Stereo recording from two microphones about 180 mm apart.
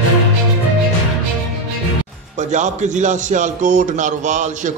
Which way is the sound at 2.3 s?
40° right (ahead or behind).